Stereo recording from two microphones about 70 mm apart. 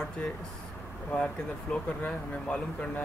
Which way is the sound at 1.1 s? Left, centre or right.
Centre.